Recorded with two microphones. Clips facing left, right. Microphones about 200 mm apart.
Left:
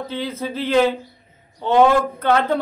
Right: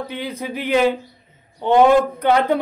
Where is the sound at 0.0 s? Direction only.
15° right (ahead or behind).